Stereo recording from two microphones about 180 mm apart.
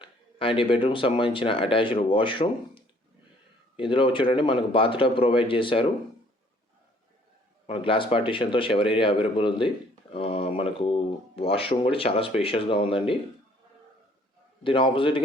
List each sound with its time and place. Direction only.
0.0 s speech: 30° left (ahead or behind)
7.7 s speech: 30° left (ahead or behind)
14.6 s speech: 30° left (ahead or behind)